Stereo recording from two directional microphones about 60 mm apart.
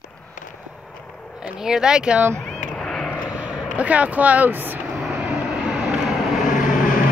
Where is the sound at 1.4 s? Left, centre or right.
Centre.